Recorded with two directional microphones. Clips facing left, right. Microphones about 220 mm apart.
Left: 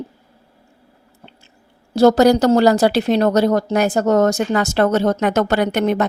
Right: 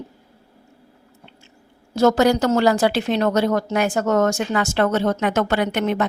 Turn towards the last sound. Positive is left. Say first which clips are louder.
# left 3 dB
turn(degrees=40)  # may be behind; listen again after turning